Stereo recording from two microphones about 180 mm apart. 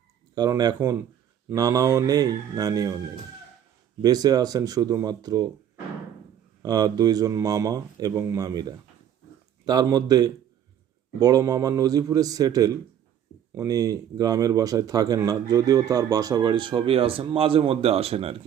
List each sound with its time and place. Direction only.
0.3 s speech: 20° right (ahead or behind)
4.0 s speech: 20° right (ahead or behind)
6.6 s speech: 20° right (ahead or behind)